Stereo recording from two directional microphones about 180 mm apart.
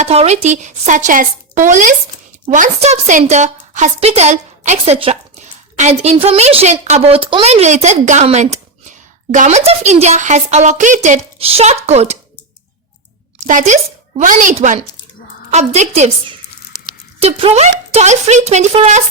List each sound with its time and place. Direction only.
0.0 s a woman's voice: 35° right (ahead or behind)
13.5 s a woman's voice: 45° right (ahead or behind)